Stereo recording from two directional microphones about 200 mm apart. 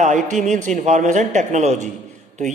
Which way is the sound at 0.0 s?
35° right (ahead or behind).